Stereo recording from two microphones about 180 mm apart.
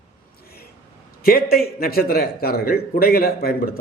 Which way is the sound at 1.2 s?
55° left (ahead or behind).